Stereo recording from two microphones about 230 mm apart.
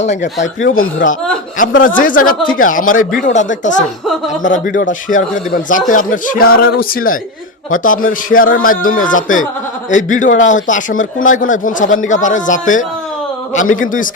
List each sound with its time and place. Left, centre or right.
0.0 s a man's voice: left
0.3 s speech: left
1.8 s a man's voice: left